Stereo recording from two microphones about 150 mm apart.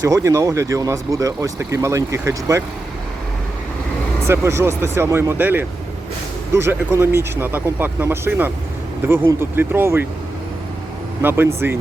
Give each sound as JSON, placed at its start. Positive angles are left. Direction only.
{"t": 0.0, "sound": "speech", "side_deg": -20}
{"t": 4.3, "sound": "speech", "side_deg": -20}
{"t": 11.2, "sound": "speech", "side_deg": -15}